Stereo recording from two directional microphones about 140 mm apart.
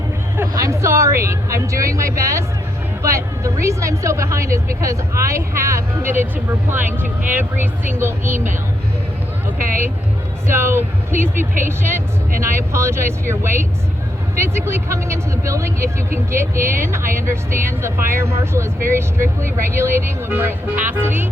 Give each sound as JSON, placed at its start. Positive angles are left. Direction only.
{"t": 0.6, "sound": "speech", "side_deg": -20}
{"t": 9.6, "sound": "speech", "side_deg": -75}
{"t": 10.4, "sound": "speech", "side_deg": -15}